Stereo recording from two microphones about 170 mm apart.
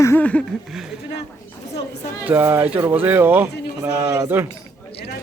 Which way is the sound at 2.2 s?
10° right (ahead or behind).